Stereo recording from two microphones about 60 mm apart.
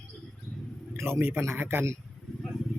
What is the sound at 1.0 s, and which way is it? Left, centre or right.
Speech, right.